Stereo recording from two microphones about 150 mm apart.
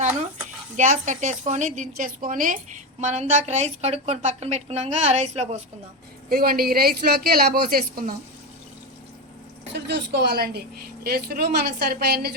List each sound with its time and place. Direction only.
0.8 s a woman's voice: 55° right (ahead or behind)
6.2 s speech: 80° right
10.1 s a woman's voice: 90° right